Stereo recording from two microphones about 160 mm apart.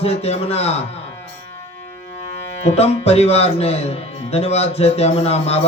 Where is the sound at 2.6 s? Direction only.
40° left (ahead or behind).